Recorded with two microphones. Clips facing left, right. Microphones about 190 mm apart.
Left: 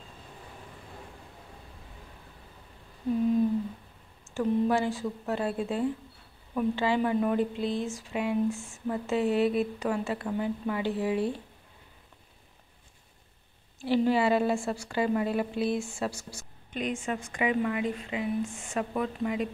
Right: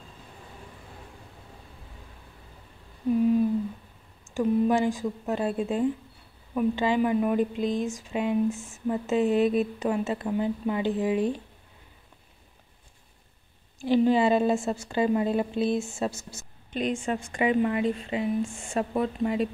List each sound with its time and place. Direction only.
4.3 s a woman's voice: 15° right (ahead or behind)
13.8 s a woman's voice: 20° right (ahead or behind)